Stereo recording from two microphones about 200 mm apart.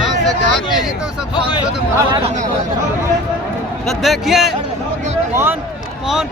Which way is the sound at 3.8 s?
Centre (ahead or behind).